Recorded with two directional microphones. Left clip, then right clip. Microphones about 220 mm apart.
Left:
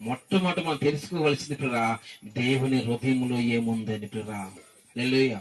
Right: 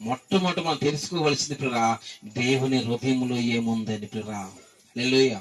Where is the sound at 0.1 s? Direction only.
45° right (ahead or behind).